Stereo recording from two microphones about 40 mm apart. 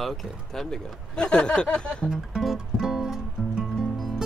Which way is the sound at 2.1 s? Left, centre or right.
Centre.